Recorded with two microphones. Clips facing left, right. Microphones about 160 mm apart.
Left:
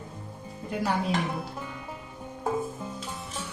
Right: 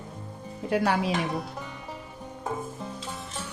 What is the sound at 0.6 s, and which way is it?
Speech, 75° right (ahead or behind).